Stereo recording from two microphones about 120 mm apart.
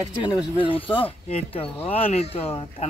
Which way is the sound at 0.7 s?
45° left (ahead or behind).